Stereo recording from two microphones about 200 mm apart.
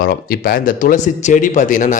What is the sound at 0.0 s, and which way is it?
Speech, 50° left (ahead or behind).